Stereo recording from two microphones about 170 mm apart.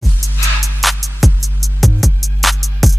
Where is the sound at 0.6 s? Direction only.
Centre (ahead or behind).